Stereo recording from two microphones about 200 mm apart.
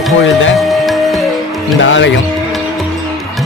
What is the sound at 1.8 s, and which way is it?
Speech, 70° left (ahead or behind).